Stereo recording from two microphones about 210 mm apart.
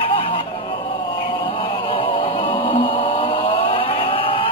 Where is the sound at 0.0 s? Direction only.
25° left (ahead or behind).